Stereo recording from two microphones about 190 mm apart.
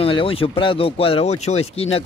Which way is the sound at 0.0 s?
30° left (ahead or behind).